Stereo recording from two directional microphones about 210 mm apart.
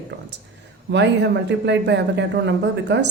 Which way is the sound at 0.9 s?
55° right (ahead or behind).